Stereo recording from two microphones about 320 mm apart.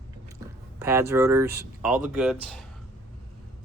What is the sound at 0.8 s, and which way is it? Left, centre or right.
Speech, centre.